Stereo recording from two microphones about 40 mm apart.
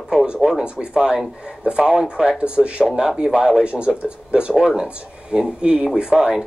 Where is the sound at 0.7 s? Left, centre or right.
Right.